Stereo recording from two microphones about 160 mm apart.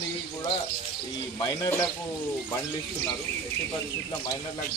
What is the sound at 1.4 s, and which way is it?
Speech, 20° left (ahead or behind).